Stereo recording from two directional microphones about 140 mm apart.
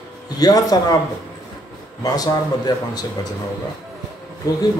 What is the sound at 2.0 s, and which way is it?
A man's voice, 30° left (ahead or behind).